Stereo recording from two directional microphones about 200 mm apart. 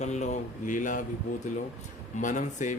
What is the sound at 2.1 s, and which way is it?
Speech, 40° left (ahead or behind).